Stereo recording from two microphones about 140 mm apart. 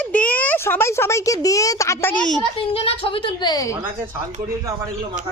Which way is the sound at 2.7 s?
40° left (ahead or behind).